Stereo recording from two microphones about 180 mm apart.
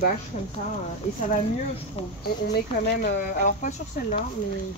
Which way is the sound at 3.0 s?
50° left (ahead or behind).